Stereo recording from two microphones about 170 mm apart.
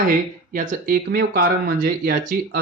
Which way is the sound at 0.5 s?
50° right (ahead or behind).